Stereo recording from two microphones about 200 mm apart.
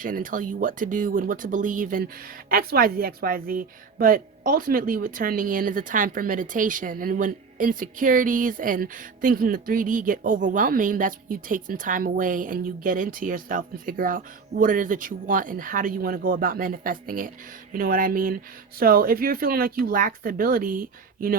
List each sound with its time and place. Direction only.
0.0 s speech: 40° right (ahead or behind)